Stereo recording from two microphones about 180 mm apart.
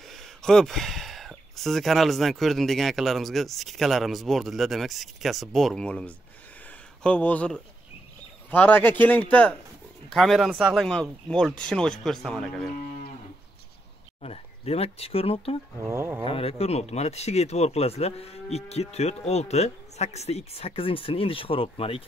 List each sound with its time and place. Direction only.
0.1 s a man's voice: centre (ahead or behind)
14.2 s speech: 35° left (ahead or behind)
15.9 s speech: 15° right (ahead or behind)
16.3 s speech: 30° left (ahead or behind)